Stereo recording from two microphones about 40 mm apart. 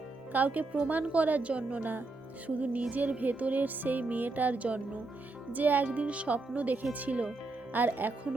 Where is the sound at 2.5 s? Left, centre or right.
Right.